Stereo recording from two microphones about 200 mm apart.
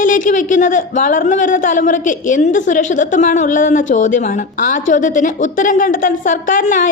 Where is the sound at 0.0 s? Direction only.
40° left (ahead or behind).